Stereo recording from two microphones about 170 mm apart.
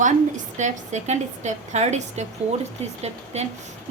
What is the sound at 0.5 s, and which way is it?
A woman's voice, 45° right (ahead or behind).